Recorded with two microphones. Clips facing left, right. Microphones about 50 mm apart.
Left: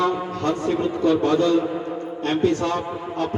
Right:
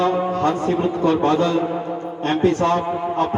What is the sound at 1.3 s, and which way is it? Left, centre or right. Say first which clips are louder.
A man's voice: even; right.